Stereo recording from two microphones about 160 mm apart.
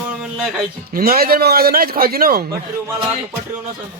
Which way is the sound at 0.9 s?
70° right (ahead or behind).